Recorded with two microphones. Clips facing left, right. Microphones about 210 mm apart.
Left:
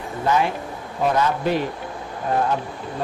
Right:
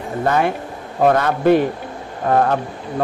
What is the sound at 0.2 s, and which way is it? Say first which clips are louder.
Speech: right 3 dB; 60° right (ahead or behind).